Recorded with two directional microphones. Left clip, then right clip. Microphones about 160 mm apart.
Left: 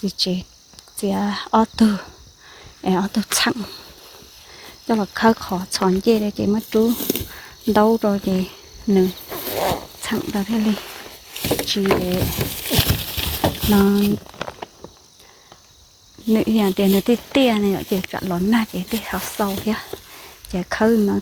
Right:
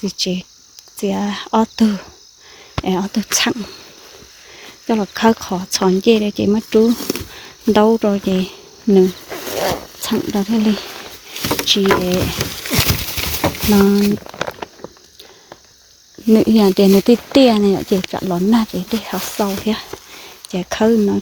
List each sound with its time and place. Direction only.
0.0 s speech: 20° right (ahead or behind)
4.9 s speech: 25° right (ahead or behind)
8.4 s cricket: 50° right (ahead or behind)
9.3 s zipper: centre (ahead or behind)
10.2 s speech: 40° right (ahead or behind)
12.8 s a sound: 30° right (ahead or behind)
13.9 s a sound: 50° right (ahead or behind)
16.3 s speech: 50° right (ahead or behind)
18.2 s speech: 30° right (ahead or behind)